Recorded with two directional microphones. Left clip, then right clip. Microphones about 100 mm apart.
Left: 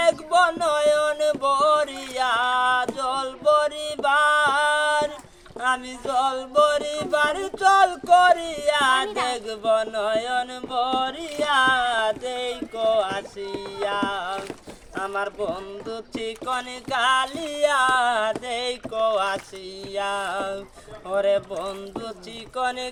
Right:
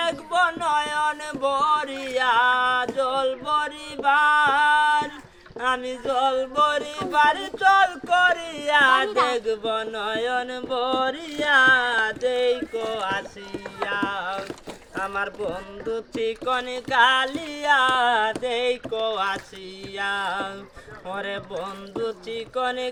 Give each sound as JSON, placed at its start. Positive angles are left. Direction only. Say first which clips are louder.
{"t": 0.0, "sound": "music", "louder": "left 3 dB", "side_deg": 40}
{"t": 9.0, "sound": "speech", "louder": "right 4 dB", "side_deg": -20}
{"t": 9.5, "sound": "music", "louder": "left 3 dB", "side_deg": 40}
{"t": 14.9, "sound": "a sound", "louder": "even", "side_deg": 35}
{"t": 15.9, "sound": "music", "louder": "right 6 dB", "side_deg": 40}